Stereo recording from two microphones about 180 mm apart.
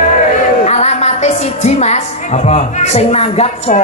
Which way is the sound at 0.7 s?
40° left (ahead or behind).